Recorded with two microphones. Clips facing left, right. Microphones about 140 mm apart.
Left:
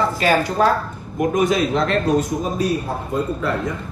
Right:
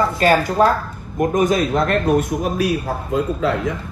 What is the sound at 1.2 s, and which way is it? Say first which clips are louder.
A man's voice: right 1 dB; 50° right (ahead or behind).